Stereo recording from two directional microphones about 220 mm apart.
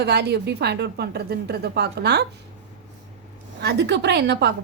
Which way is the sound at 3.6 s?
50° right (ahead or behind).